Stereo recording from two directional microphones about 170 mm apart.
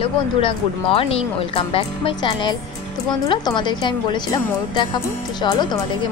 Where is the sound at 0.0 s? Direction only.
35° left (ahead or behind).